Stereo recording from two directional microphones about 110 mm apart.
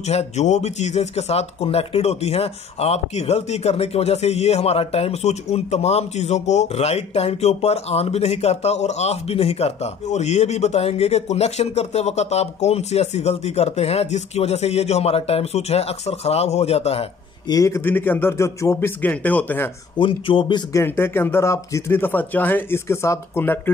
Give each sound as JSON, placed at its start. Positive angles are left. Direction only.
{"t": 0.0, "sound": "speech", "side_deg": 85}
{"t": 17.5, "sound": "speech", "side_deg": 30}
{"t": 18.9, "sound": "speech", "side_deg": 15}
{"t": 20.0, "sound": "speech", "side_deg": 55}
{"t": 20.7, "sound": "speech", "side_deg": 20}